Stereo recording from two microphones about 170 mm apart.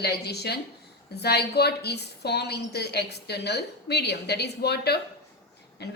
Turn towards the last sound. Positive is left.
turn(degrees=75)  # may be behind; listen again after turning